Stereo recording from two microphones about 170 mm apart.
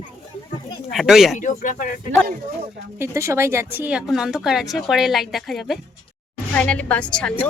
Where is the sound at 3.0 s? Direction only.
15° right (ahead or behind).